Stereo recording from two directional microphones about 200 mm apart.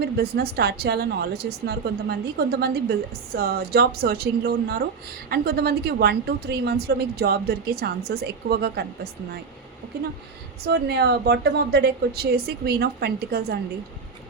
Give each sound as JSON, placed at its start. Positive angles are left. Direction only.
{"t": 0.0, "sound": "a woman's voice", "side_deg": -50}
{"t": 10.6, "sound": "a woman's voice", "side_deg": -55}